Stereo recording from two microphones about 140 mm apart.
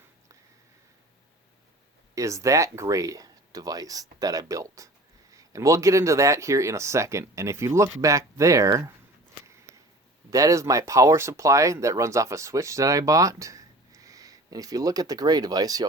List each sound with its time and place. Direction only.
2.1 s speech: 20° right (ahead or behind)
10.2 s speech: 25° right (ahead or behind)